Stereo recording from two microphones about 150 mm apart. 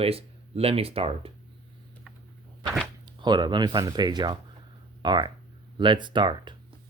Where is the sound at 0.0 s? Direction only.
40° right (ahead or behind).